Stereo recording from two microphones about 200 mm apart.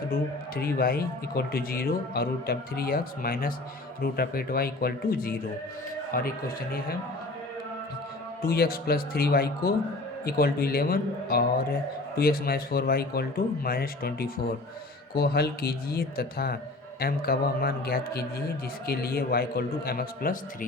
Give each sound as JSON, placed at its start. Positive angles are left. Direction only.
{"t": 0.1, "sound": "speech", "side_deg": 50}
{"t": 8.4, "sound": "speech", "side_deg": 50}